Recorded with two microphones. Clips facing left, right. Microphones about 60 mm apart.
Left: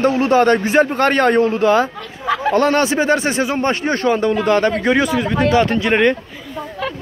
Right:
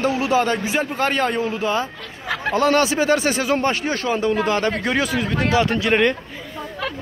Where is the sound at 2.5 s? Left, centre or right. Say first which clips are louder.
Left 1 dB; left.